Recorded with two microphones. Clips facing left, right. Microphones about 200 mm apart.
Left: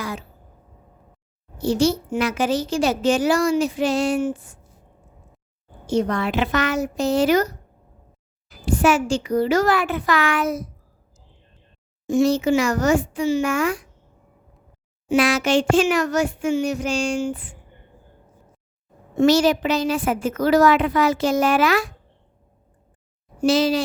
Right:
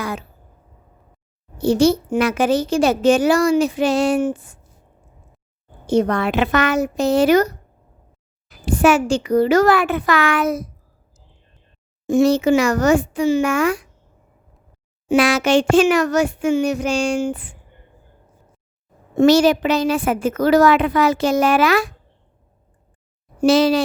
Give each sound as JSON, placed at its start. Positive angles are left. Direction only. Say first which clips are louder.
{"t": 0.0, "sound": "a sound", "louder": "right 3 dB", "side_deg": -60}
{"t": 1.5, "sound": "a child's voice", "louder": "right 4 dB", "side_deg": -60}
{"t": 5.8, "sound": "a child's voice", "louder": "right 4 dB", "side_deg": -60}
{"t": 8.4, "sound": "a woman's voice", "louder": "right 3 dB", "side_deg": -65}
{"t": 12.0, "sound": "a woman's voice", "louder": "right 3 dB", "side_deg": -60}
{"t": 15.1, "sound": "a woman's voice", "louder": "right 3 dB", "side_deg": -75}
{"t": 19.1, "sound": "a woman's voice", "louder": "right 3 dB", "side_deg": -60}
{"t": 23.4, "sound": "a child's voice", "louder": "right 4 dB", "side_deg": -65}